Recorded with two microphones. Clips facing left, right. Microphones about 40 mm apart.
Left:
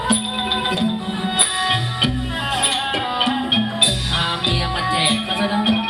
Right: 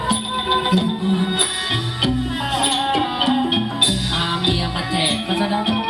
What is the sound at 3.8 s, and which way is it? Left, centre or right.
Music, left.